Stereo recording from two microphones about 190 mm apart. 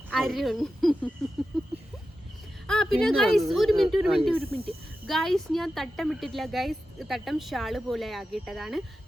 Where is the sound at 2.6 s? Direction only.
Centre (ahead or behind).